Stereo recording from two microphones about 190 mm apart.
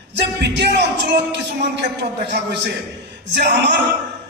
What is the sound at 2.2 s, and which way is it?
Speech, 65° right (ahead or behind).